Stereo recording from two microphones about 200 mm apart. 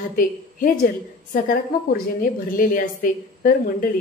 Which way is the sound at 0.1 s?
45° left (ahead or behind).